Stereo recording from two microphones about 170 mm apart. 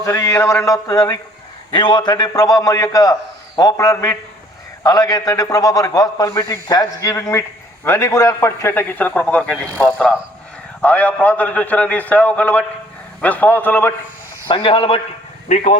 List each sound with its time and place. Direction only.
0.0 s a man's voice: 15° left (ahead or behind)
14.4 s a man's voice: 30° left (ahead or behind)
15.4 s speech: 45° left (ahead or behind)